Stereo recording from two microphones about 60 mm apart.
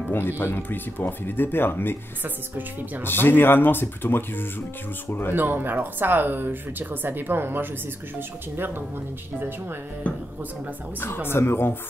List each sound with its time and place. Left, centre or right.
0.1 s speech: left
3.0 s speech: left
5.3 s speech: right
10.1 s speech: left
11.2 s speech: left